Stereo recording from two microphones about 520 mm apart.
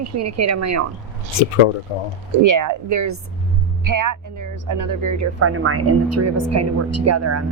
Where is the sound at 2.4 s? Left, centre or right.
Right.